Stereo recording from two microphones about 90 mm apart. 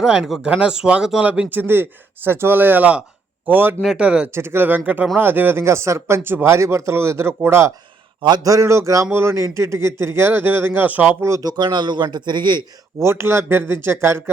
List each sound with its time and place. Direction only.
0.0 s speech: 5° right (ahead or behind); by 3.8 s 20° right (ahead or behind)
3.9 s speech: 10° right (ahead or behind)
4.4 s a man's voice: 25° right (ahead or behind)
11.4 s a man's voice: 55° right (ahead or behind)
13.0 s speech: 30° right (ahead or behind)